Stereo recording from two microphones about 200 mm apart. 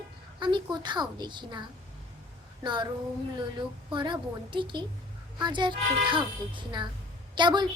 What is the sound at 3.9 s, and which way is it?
A child's voice, 25° right (ahead or behind).